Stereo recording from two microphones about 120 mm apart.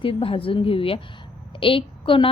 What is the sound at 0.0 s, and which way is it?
A woman's voice, 50° left (ahead or behind).